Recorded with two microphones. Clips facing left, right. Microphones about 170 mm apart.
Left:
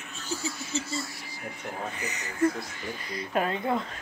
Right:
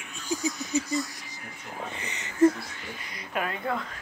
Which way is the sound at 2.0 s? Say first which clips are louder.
Left 3 dB; 30° right (ahead or behind).